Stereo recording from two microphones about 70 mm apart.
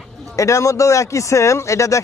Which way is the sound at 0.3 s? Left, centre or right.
Left.